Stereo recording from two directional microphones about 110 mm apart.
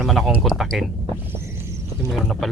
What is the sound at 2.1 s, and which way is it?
Speech, 5° right (ahead or behind).